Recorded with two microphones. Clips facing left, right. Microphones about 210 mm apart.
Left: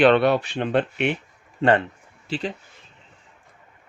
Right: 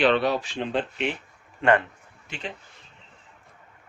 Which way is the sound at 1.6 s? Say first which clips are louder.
Left 2 dB; 30° left (ahead or behind).